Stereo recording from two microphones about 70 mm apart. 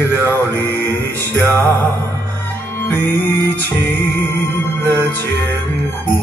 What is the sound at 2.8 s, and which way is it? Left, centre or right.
Music, left.